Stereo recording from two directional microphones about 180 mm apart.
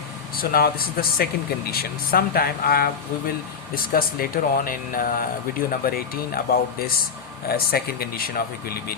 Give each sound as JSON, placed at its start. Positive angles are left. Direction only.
{"t": 0.3, "sound": "speech", "side_deg": 55}
{"t": 3.9, "sound": "speech", "side_deg": 50}